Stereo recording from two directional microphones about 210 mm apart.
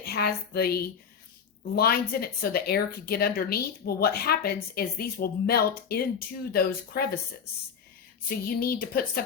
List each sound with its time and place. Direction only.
0.0 s speech: 50° left (ahead or behind)
8.4 s speech: 45° left (ahead or behind)